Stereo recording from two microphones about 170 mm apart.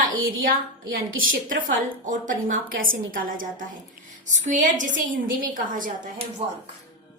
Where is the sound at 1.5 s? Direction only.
50° right (ahead or behind).